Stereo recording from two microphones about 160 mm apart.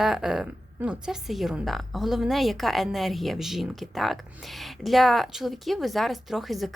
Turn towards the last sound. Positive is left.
turn(degrees=0)  # may be behind; listen again after turning